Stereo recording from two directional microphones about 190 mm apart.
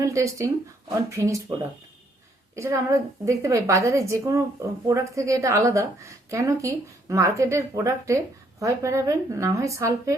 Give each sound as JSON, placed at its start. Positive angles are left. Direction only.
{"t": 0.0, "sound": "a woman's voice", "side_deg": -15}